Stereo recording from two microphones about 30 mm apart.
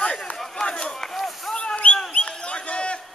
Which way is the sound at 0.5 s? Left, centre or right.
Left.